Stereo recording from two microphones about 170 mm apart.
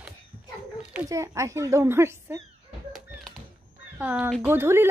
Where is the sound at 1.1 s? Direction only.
20° right (ahead or behind).